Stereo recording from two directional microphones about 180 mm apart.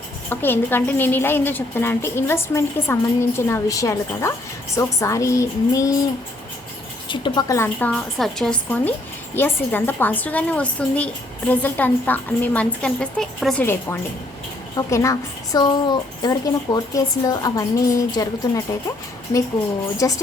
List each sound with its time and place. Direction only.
0.3 s a woman's voice: 10° left (ahead or behind)
7.1 s a woman's voice: 25° left (ahead or behind)
20.0 s a woman's voice: 20° left (ahead or behind)